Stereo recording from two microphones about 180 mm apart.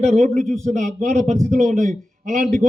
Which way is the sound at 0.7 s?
45° right (ahead or behind).